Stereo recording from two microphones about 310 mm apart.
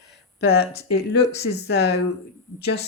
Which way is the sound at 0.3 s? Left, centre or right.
Left.